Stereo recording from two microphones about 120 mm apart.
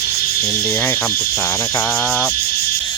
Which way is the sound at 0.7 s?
10° left (ahead or behind).